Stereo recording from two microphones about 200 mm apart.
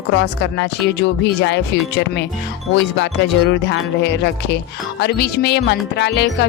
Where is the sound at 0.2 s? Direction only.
60° left (ahead or behind).